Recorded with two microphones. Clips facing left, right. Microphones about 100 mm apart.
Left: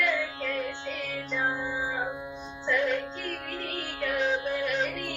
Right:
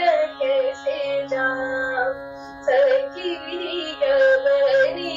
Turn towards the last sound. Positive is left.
turn(degrees=-40)  # may be behind; listen again after turning